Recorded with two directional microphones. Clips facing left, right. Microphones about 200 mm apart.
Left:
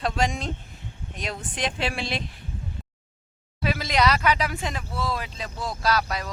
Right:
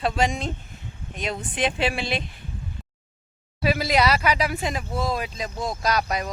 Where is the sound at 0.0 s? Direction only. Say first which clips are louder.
Right 2 dB; centre (ahead or behind).